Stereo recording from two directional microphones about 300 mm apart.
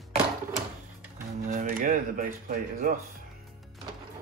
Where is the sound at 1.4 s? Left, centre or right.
Right.